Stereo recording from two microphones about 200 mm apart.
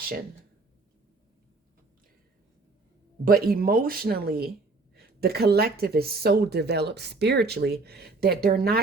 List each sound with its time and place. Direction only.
3.2 s speech: 45° right (ahead or behind)